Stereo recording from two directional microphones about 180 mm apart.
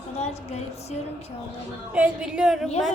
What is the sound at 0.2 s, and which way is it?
Speech, 35° left (ahead or behind).